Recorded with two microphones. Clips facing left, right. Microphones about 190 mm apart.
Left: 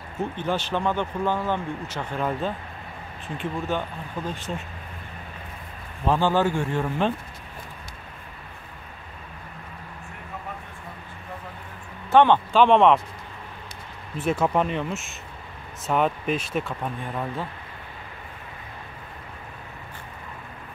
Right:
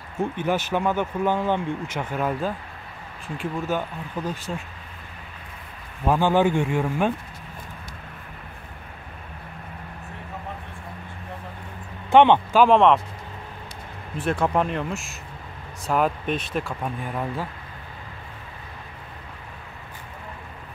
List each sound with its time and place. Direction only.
0.2 s speech: 10° right (ahead or behind)
2.1 s speech: 5° right (ahead or behind)
6.0 s speech: 15° right (ahead or behind)
12.1 s speech: 20° right (ahead or behind)
12.5 s speech: centre (ahead or behind)
14.1 s speech: 5° left (ahead or behind)